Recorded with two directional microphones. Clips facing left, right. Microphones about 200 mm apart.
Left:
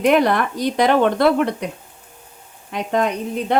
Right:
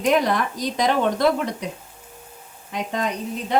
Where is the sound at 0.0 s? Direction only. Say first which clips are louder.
Left 4 dB; 60° left (ahead or behind).